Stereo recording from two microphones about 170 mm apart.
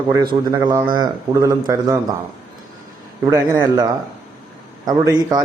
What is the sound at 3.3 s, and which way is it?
A man's voice, 20° right (ahead or behind).